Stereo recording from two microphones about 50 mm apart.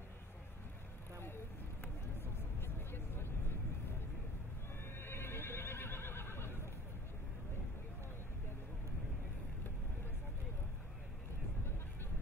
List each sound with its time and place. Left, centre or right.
2.6 s vehicle: left
4.9 s neigh: left